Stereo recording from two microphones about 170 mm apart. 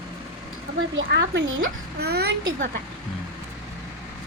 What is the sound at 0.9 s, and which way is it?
Speech, 90° right.